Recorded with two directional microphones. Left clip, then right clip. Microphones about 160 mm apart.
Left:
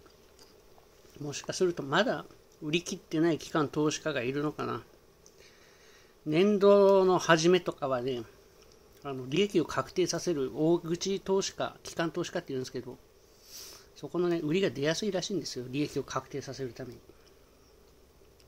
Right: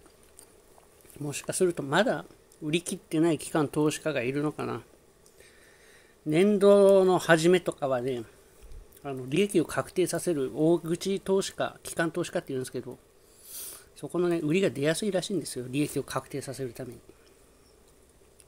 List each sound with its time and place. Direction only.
1.2 s speech: 40° right (ahead or behind)
6.2 s speech: 25° right (ahead or behind)